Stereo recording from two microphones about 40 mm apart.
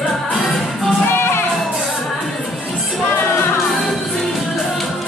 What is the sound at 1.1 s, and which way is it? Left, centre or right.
Music, left.